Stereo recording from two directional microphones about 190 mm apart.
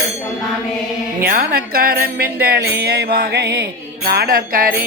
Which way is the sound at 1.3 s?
50° right (ahead or behind).